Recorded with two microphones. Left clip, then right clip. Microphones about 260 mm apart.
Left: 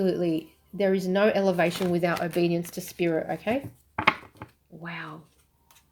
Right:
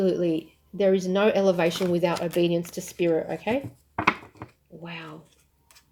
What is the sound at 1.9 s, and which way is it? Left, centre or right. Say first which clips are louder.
Speech: right 2 dB; left.